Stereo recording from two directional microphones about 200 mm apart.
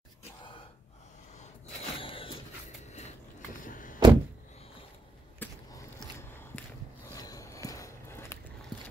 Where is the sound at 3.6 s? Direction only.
40° left (ahead or behind).